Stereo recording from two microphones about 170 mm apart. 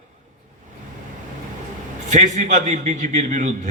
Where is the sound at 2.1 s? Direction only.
45° right (ahead or behind).